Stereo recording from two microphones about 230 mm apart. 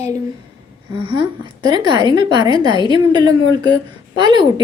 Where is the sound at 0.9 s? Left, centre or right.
Right.